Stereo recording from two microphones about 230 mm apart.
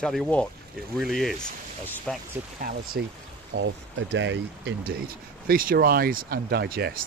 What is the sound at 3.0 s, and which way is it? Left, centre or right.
Speech, right.